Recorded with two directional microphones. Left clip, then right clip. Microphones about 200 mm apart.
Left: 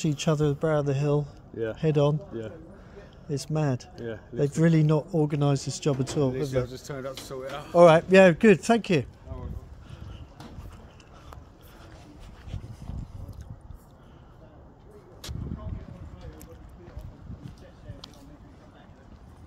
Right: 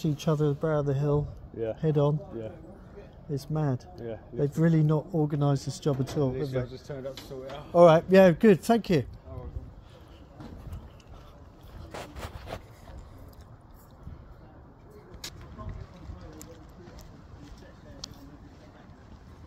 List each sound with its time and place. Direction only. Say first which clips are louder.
0.0 s speech: left 2 dB; 10° left (ahead or behind)
3.3 s speech: left 3 dB; 10° left (ahead or behind)
6.3 s a man's voice: left 4 dB; 50° left (ahead or behind)
7.7 s speech: left 2 dB; centre (ahead or behind)